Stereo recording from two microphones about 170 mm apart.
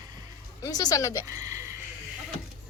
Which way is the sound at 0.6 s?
20° left (ahead or behind).